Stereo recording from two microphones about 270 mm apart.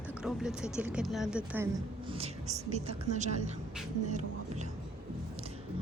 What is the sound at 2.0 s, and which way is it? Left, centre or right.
A woman's voice, right.